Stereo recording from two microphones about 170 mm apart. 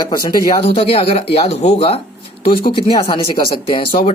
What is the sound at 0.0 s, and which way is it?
Speech, 30° left (ahead or behind).